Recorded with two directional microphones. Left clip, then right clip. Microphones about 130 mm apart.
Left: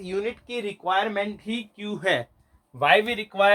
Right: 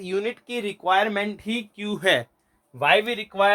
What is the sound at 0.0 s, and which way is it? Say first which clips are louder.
Speech: right 2 dB; 50° right (ahead or behind).